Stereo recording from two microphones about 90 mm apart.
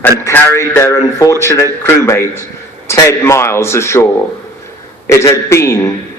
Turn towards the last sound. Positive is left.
turn(degrees=35)  # may be behind; listen again after turning